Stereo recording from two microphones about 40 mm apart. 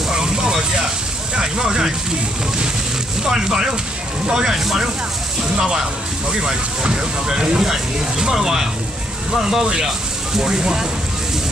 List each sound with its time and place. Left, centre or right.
0.1 s vehicle: centre
1.3 s a sound: centre
3.3 s speech: centre
5.6 s speech: centre